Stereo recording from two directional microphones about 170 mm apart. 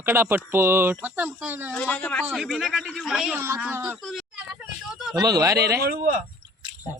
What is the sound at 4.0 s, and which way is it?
Speech, centre (ahead or behind).